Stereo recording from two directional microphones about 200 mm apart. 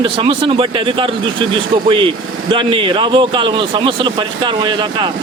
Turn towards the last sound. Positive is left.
turn(degrees=-20)  # may be behind; listen again after turning